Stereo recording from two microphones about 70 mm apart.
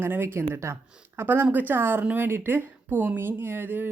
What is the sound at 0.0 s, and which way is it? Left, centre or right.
Speech, right.